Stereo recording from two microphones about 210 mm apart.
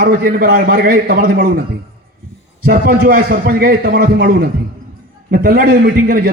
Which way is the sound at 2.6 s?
45° right (ahead or behind).